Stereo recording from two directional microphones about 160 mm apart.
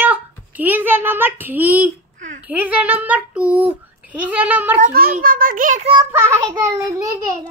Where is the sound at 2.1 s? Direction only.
50° right (ahead or behind).